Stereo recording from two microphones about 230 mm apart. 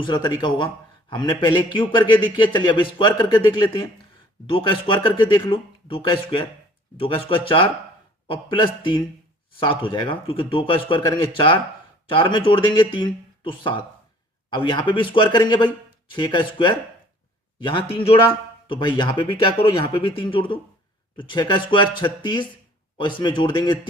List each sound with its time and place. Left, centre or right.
0.0 s a man's voice: centre